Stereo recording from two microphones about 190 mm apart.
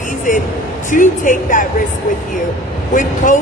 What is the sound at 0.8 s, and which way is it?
Speech, 45° left (ahead or behind).